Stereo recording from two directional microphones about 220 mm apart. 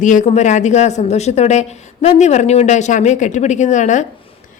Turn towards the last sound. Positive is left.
turn(degrees=35)  # may be behind; listen again after turning